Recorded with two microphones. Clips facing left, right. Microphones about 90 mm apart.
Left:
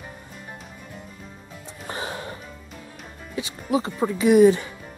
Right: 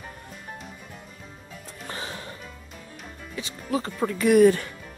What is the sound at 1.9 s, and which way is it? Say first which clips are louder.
Music: left 5 dB; 25° left (ahead or behind).